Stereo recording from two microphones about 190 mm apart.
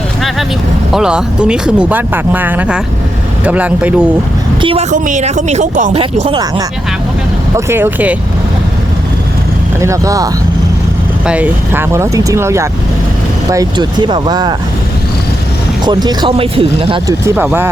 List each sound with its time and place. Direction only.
0.9 s speech: 5° right (ahead or behind)
4.6 s speech: 30° right (ahead or behind)
6.0 s speech: 25° right (ahead or behind)
7.5 s speech: 10° right (ahead or behind)
9.8 s speech: 15° right (ahead or behind)
11.3 s speech: 10° right (ahead or behind)
15.9 s speech: 25° right (ahead or behind)
17.2 s speech: 10° right (ahead or behind)